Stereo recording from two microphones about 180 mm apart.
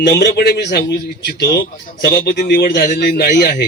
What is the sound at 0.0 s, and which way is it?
A man's voice, 70° left (ahead or behind).